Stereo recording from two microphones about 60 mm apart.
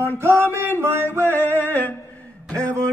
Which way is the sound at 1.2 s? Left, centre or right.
Left.